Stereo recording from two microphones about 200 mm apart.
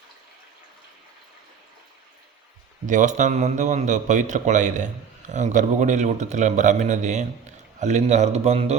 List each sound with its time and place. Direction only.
2.8 s a man's voice: 40° right (ahead or behind)